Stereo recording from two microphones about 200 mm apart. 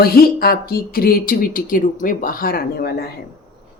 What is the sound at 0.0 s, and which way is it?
Speech, 50° left (ahead or behind).